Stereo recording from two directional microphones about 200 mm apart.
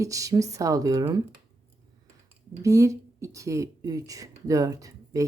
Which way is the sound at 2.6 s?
15° right (ahead or behind).